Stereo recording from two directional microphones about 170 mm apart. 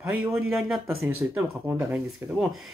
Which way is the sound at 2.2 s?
15° right (ahead or behind).